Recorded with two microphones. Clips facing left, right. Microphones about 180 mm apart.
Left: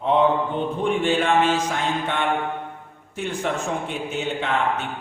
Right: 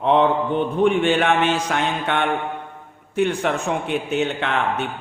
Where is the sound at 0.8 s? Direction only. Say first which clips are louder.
Right 3 dB; 65° right (ahead or behind).